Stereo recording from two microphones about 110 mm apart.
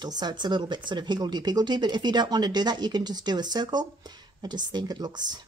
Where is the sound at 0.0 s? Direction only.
40° right (ahead or behind).